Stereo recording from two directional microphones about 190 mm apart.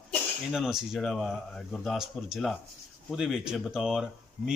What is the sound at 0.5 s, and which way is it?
Speech, centre (ahead or behind).